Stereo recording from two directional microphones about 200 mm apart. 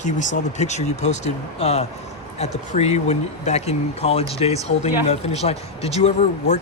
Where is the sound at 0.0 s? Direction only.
35° left (ahead or behind).